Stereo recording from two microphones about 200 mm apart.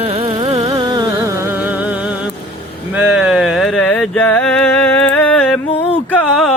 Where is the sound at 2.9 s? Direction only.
Centre (ahead or behind).